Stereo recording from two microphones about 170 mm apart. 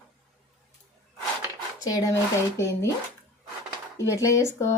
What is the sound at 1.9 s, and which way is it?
Speech, 20° left (ahead or behind).